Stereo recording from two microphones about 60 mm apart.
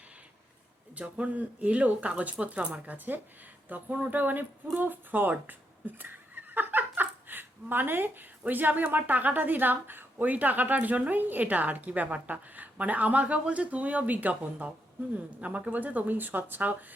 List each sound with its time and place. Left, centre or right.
1.1 s speech: right